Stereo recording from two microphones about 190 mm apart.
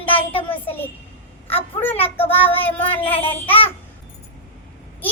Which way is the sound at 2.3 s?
30° left (ahead or behind).